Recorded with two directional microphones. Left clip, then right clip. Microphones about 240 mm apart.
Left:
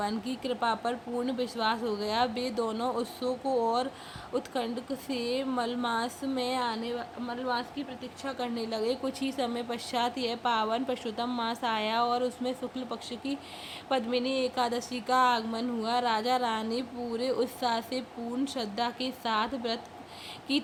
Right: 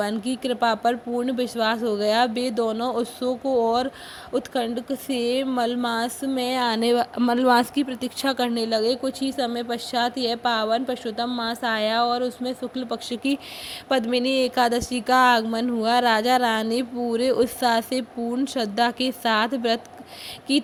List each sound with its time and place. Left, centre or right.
0.0 s speech: right
6.8 s speech: right